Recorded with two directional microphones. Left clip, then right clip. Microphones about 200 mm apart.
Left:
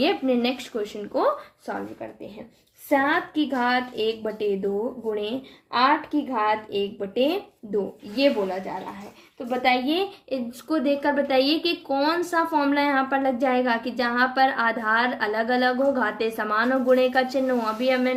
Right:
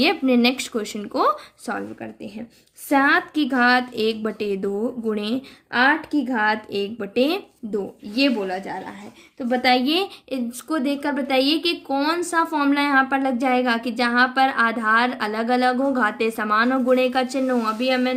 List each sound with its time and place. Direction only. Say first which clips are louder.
0.0 s speech: right 4 dB; 40° right (ahead or behind)
9.5 s speech: right 3 dB; 55° right (ahead or behind)
10.2 s speech: right 1 dB; 30° right (ahead or behind)